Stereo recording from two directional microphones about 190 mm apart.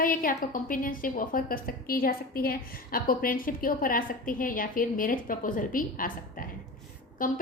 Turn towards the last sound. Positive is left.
turn(degrees=45)  # may be behind; listen again after turning